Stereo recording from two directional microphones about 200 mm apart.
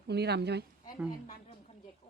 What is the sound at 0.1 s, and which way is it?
Speech, 55° right (ahead or behind).